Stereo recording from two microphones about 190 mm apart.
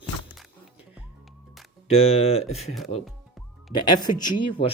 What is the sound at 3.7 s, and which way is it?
Speech, 20° left (ahead or behind).